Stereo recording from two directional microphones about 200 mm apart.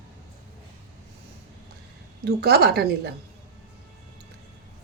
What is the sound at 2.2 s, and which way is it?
Speech, 55° right (ahead or behind).